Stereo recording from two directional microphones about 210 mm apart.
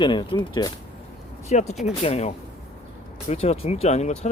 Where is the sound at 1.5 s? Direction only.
30° left (ahead or behind).